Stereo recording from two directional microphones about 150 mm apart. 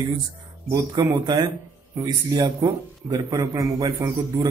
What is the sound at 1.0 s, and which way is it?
A man's voice, 25° right (ahead or behind).